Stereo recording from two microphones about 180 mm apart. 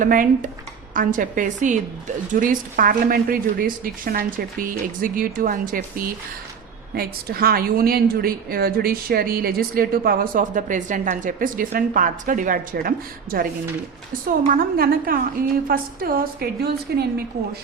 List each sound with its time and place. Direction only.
0.0 s a woman's voice: 50° right (ahead or behind)
6.9 s a woman's voice: 55° right (ahead or behind)